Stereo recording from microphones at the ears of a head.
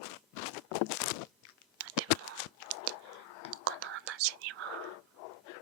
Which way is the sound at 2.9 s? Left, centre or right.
Left.